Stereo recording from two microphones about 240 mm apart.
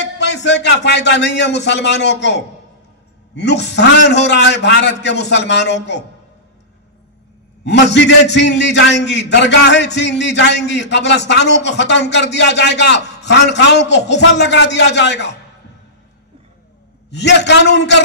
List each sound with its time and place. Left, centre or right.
0.0 s a man's voice: left
7.6 s a man's voice: left
17.1 s a man's voice: left